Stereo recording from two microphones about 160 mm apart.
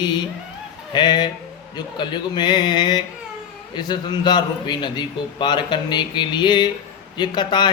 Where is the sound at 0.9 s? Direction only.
25° left (ahead or behind).